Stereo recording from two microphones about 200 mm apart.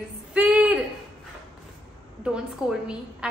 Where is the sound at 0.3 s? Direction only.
5° right (ahead or behind).